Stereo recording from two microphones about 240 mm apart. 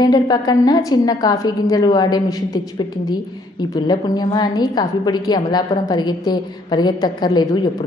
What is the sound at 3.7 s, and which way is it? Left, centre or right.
A woman's voice, centre.